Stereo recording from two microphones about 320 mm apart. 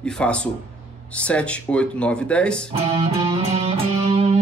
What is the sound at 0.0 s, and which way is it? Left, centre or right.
Speech, centre.